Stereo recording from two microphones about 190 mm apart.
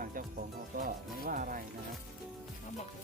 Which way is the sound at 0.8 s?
50° right (ahead or behind).